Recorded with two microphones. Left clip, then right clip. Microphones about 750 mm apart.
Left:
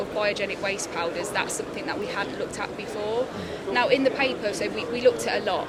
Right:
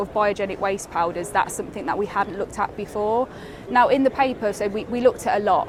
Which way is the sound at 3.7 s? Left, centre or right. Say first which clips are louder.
Right 5 dB; right.